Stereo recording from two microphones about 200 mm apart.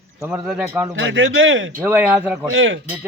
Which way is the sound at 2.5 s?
70° right (ahead or behind).